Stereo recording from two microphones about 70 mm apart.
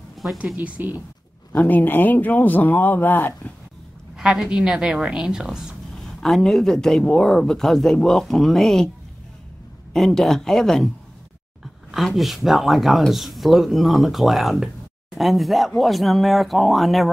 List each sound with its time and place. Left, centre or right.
0.6 s speech: right
1.5 s speech: left
4.2 s a woman's voice: centre
6.2 s speech: centre
9.9 s speech: centre
11.9 s speech: centre